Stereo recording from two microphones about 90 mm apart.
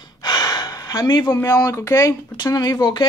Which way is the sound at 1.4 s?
40° left (ahead or behind).